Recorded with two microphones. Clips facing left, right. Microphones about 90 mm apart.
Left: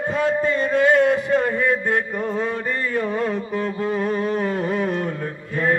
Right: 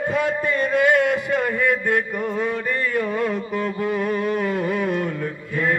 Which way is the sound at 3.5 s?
30° left (ahead or behind).